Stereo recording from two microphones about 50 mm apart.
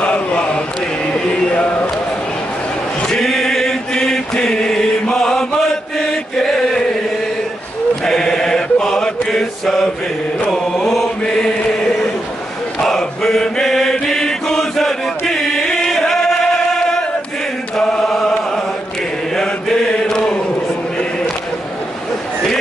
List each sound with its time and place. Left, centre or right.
0.0 s a sound: left
3.0 s chant: centre
5.1 s mantra: centre
5.9 s chant: centre
8.0 s chant: centre
12.8 s chant: centre
17.7 s chant: centre
18.0 s chant: centre
19.9 s chant: left